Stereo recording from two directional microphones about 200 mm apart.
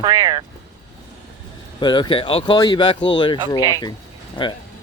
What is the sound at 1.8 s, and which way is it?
Speech, 20° left (ahead or behind).